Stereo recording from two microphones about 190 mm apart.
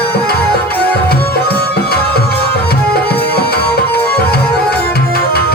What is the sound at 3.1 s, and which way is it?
Music, 55° left (ahead or behind).